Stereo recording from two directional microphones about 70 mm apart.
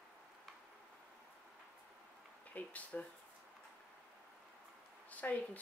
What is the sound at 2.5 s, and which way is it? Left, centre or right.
Speech, left.